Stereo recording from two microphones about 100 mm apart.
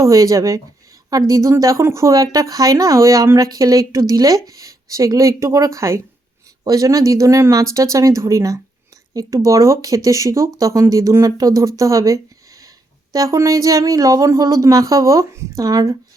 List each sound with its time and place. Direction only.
0.0 s speech: 35° right (ahead or behind)